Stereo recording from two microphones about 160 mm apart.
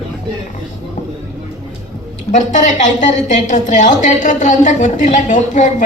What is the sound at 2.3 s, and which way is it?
A woman's voice, 50° left (ahead or behind).